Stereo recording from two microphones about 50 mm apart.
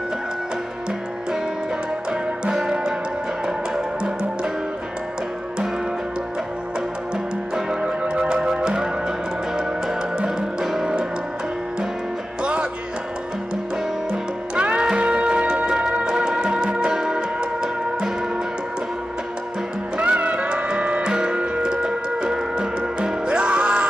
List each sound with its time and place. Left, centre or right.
2.4 s music: centre
7.5 s music: right
10.1 s music: centre
14.5 s music: right
20.0 s music: right